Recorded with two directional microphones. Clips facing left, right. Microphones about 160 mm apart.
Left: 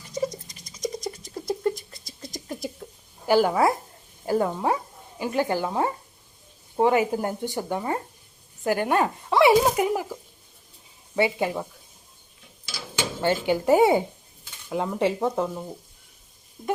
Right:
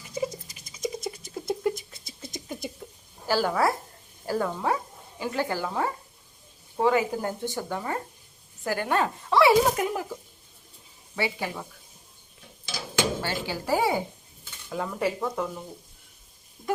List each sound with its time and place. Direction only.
0.7 s a sound: 5° right (ahead or behind)
3.2 s speech: 15° left (ahead or behind)
11.1 s speech: 25° left (ahead or behind)
13.2 s speech: 20° left (ahead or behind)